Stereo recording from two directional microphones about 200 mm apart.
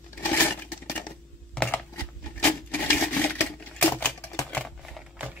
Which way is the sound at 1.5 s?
5° left (ahead or behind).